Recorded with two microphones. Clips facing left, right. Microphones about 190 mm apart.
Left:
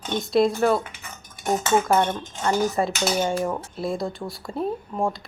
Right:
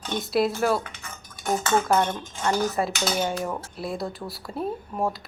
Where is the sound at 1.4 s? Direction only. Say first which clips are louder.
Left 2 dB; 20° left (ahead or behind).